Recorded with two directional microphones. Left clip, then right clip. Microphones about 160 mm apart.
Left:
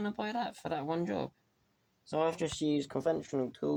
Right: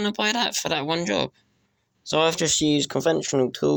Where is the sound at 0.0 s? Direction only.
15° right (ahead or behind).